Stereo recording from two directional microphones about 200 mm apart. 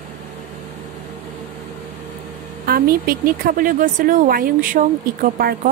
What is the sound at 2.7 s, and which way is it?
Speech, 50° right (ahead or behind).